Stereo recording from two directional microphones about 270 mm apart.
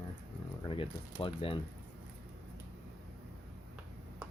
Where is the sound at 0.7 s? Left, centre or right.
Centre.